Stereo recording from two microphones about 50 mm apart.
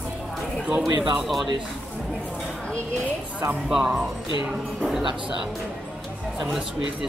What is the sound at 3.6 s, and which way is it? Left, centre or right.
Speech, centre.